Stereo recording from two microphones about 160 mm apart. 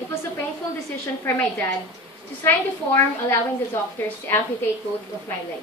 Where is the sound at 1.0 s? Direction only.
15° left (ahead or behind).